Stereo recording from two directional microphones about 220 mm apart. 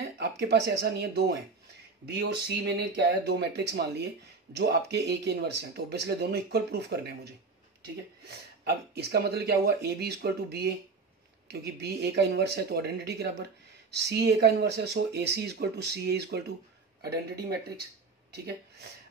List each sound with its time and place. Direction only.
0.0 s speech: 50° right (ahead or behind)